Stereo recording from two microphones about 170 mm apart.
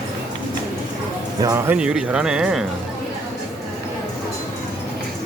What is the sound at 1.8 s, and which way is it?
Speech, 5° right (ahead or behind).